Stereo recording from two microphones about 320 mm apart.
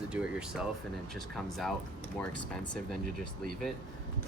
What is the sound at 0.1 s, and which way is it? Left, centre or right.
Speech, centre.